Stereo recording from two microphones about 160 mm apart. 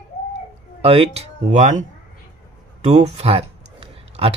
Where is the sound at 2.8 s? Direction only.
40° right (ahead or behind).